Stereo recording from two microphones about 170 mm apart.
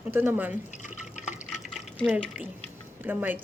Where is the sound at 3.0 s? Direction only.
10° right (ahead or behind).